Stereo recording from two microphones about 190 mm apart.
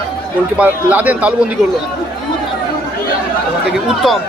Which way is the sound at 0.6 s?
10° right (ahead or behind).